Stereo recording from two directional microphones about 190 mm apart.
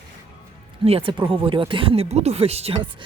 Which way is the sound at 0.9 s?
30° right (ahead or behind).